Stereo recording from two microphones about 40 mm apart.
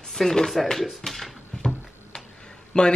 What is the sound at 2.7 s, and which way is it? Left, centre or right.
Speech, left.